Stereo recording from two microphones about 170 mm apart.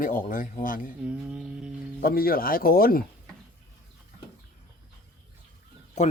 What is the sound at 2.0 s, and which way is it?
Speech, 60° left (ahead or behind).